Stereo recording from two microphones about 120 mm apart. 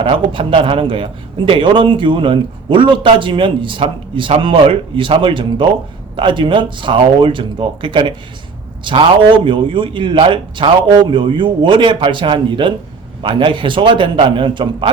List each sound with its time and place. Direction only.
0.0 s a man's voice: 45° right (ahead or behind)